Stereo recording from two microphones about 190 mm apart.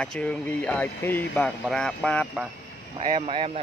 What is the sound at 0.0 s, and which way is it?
Speech, 5° left (ahead or behind).